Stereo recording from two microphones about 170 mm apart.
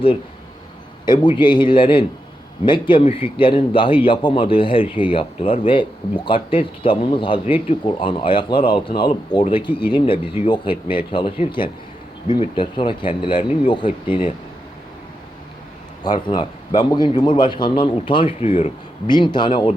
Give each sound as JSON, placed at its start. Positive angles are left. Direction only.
{"t": 1.0, "sound": "speech", "side_deg": 25}
{"t": 16.3, "sound": "speech", "side_deg": 25}